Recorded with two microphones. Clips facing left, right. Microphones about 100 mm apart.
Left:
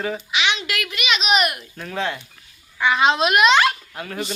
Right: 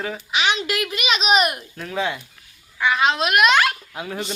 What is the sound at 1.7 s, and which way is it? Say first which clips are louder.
Speech: right 1 dB; centre (ahead or behind).